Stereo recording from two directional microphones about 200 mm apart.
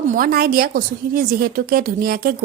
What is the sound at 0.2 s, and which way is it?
A woman's voice, 45° right (ahead or behind).